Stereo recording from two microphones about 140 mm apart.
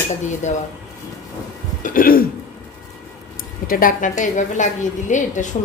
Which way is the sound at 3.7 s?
85° left.